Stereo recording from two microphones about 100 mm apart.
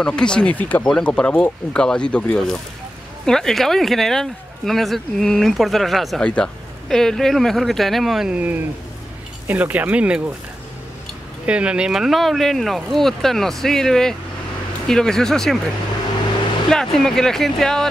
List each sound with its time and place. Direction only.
0.0 s speech: 10° left (ahead or behind)
8.4 s speech: 20° right (ahead or behind)
11.4 s speech: 10° right (ahead or behind)
16.7 s speech: 5° left (ahead or behind)